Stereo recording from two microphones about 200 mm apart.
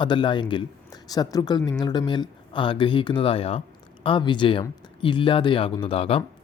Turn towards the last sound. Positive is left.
turn(degrees=30)  # may be behind; listen again after turning